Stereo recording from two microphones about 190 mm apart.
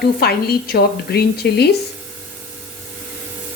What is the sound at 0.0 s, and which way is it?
A woman's voice, 55° left (ahead or behind).